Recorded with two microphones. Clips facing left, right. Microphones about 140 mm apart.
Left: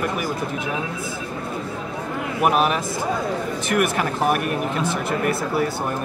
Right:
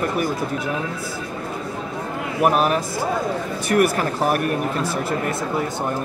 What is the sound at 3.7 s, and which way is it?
Speech, 35° right (ahead or behind).